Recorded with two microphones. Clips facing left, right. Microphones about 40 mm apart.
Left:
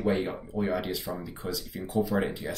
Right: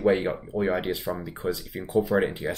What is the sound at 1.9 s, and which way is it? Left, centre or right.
Speech, right.